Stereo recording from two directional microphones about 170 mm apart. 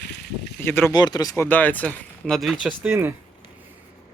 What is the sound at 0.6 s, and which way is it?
Speech, 15° left (ahead or behind).